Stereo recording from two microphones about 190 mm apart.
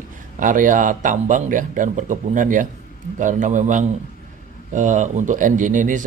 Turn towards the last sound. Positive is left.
turn(degrees=-45)  # may be behind; listen again after turning